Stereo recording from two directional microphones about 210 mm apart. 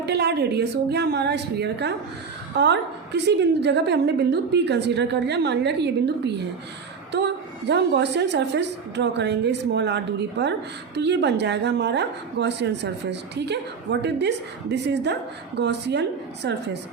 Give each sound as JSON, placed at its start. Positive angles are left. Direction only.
{"t": 0.0, "sound": "a woman's voice", "side_deg": -55}